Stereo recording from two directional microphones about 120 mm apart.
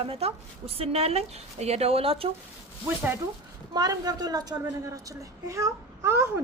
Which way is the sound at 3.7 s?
35° right (ahead or behind).